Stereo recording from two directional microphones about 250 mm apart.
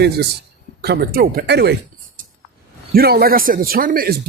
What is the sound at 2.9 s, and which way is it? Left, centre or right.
Speech, right.